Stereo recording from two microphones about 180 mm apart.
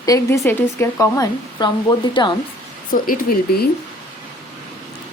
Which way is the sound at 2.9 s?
50° left (ahead or behind).